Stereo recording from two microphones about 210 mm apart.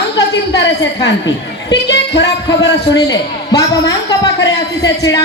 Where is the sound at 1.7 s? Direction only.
55° left (ahead or behind).